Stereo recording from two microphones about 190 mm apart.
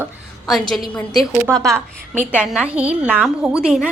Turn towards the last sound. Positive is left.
turn(degrees=-5)  # may be behind; listen again after turning